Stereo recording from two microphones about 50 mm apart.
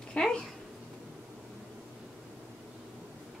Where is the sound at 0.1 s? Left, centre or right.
Centre.